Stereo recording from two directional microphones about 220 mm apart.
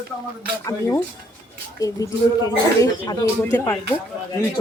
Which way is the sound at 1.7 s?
15° left (ahead or behind).